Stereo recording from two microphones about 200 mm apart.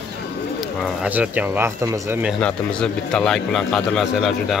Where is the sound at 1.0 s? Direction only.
10° right (ahead or behind).